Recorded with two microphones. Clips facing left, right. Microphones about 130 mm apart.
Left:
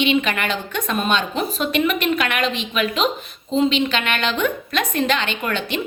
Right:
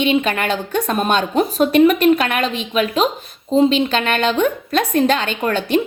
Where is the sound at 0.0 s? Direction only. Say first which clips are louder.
Right 2 dB; 40° right (ahead or behind).